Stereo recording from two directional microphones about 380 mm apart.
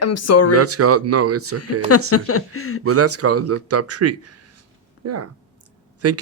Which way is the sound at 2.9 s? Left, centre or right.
Right.